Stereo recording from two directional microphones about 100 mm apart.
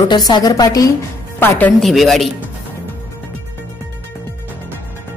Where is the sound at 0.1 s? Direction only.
45° left (ahead or behind).